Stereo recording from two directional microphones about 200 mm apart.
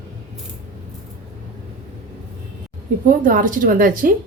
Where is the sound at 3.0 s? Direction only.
40° right (ahead or behind).